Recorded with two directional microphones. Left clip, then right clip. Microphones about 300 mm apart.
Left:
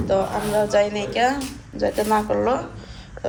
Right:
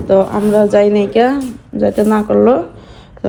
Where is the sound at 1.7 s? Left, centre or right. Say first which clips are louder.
Right 7 dB; right.